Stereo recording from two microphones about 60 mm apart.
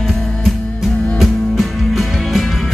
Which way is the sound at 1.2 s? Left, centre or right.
Centre.